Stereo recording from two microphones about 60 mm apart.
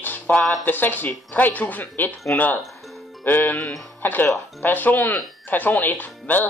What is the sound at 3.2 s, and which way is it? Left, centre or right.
Speech, left.